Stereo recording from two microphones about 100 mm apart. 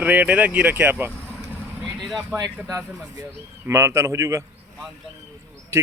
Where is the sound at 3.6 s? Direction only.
25° right (ahead or behind).